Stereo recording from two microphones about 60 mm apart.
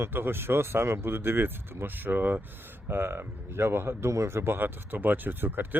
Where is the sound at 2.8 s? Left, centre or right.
Right.